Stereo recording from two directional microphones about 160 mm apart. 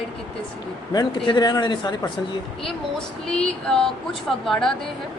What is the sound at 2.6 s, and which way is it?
Speech, 5° left (ahead or behind).